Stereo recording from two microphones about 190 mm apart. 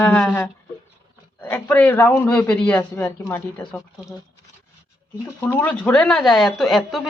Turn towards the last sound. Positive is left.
turn(degrees=0)  # may be behind; listen again after turning